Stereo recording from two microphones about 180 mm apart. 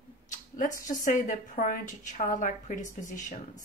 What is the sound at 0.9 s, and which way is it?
A woman's voice, 45° left (ahead or behind).